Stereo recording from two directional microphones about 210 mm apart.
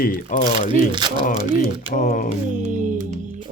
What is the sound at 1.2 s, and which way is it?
Speech, 40° left (ahead or behind).